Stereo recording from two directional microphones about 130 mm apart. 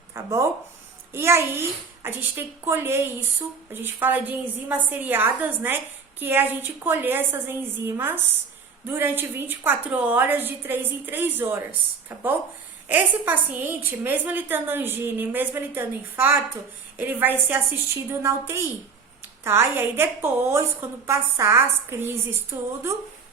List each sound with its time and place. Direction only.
0.1 s a woman's voice: 25° right (ahead or behind)
12.9 s a woman's voice: 15° right (ahead or behind)